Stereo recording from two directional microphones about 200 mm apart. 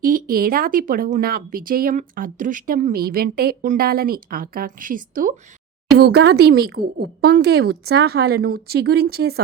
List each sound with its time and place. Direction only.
0.0 s speech: 45° right (ahead or behind)
6.1 s speech: 55° right (ahead or behind)